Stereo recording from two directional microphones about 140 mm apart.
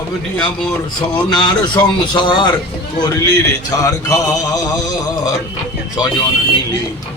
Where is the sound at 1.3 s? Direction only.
35° left (ahead or behind).